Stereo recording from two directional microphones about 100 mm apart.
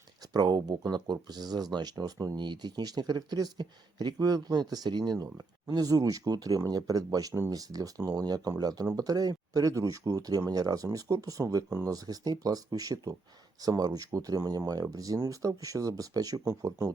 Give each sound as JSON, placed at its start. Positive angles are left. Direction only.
{"t": 0.3, "sound": "speech", "side_deg": -45}
{"t": 16.4, "sound": "speech", "side_deg": -25}